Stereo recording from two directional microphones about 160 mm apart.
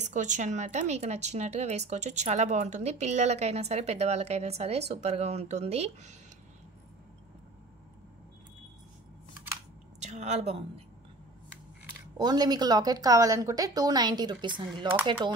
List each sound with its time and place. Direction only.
0.0 s speech: 50° right (ahead or behind)
9.9 s a sound: 45° right (ahead or behind)
12.2 s a woman's voice: 25° right (ahead or behind)